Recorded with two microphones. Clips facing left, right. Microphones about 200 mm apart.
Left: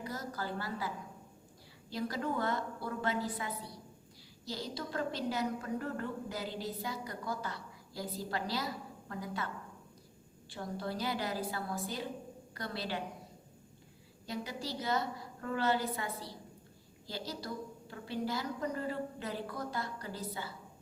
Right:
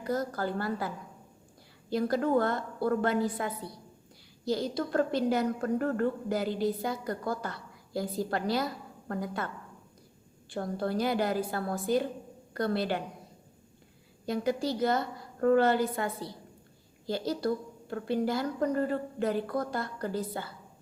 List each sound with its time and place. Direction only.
0.0 s a woman's voice: 55° right (ahead or behind)
10.5 s a woman's voice: 55° right (ahead or behind)
14.3 s a woman's voice: 55° right (ahead or behind)